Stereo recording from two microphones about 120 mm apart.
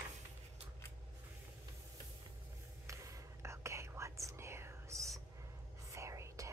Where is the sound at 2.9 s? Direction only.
25° right (ahead or behind).